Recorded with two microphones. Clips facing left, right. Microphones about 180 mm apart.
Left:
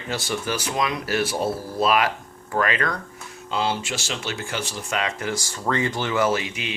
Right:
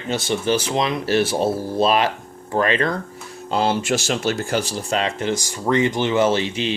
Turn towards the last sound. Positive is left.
turn(degrees=-30)  # may be behind; listen again after turning